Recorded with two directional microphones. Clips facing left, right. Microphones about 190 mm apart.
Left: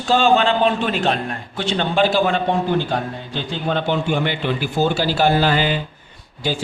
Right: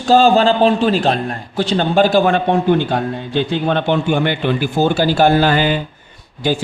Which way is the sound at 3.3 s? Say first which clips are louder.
Right 7 dB; 60° right (ahead or behind).